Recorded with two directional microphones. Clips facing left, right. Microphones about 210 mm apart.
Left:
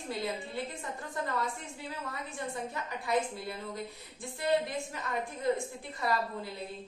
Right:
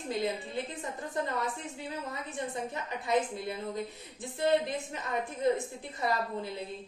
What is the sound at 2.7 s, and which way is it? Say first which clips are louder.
A woman's voice: right 2 dB; 20° right (ahead or behind).